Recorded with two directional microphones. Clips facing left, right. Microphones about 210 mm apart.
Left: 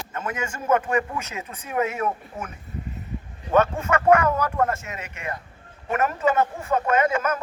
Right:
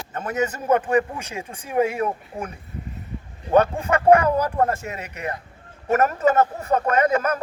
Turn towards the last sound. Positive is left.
turn(degrees=-40)  # may be behind; listen again after turning